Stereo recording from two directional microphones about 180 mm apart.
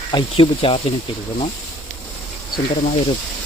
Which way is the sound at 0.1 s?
25° left (ahead or behind).